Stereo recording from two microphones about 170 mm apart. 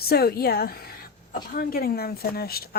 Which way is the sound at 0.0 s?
65° left (ahead or behind).